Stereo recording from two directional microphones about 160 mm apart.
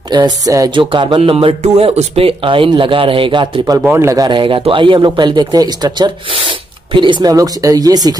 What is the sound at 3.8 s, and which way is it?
Speech, 15° right (ahead or behind).